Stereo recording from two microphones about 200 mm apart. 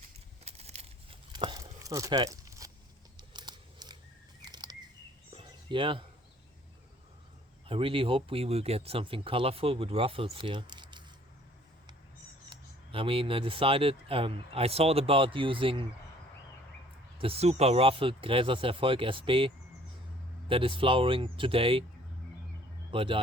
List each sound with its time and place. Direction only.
0.4 s a sound: 30° right (ahead or behind); by 2.7 s 15° right (ahead or behind)
3.2 s scissors: 20° right (ahead or behind)
4.4 s a sound: 20° right (ahead or behind)
7.7 s speech: 25° right (ahead or behind)
12.5 s speech: 25° right (ahead or behind)
17.2 s speech: 30° right (ahead or behind)
22.9 s speech: 25° right (ahead or behind)